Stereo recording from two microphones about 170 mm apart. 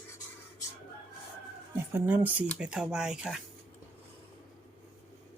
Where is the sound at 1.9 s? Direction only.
10° right (ahead or behind).